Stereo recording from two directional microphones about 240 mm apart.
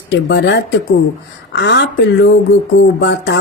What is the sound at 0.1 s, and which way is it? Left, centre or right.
Speech, left.